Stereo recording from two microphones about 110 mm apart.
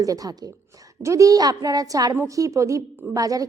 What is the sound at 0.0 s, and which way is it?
A woman's voice, 35° right (ahead or behind).